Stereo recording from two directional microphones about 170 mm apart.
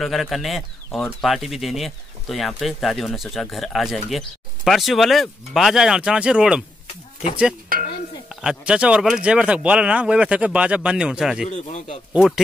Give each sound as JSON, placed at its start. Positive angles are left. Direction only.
{"t": 0.0, "sound": "speech", "side_deg": 0}
{"t": 8.3, "sound": "speech", "side_deg": -5}
{"t": 11.4, "sound": "a man's voice", "side_deg": 45}
{"t": 12.1, "sound": "speech", "side_deg": 0}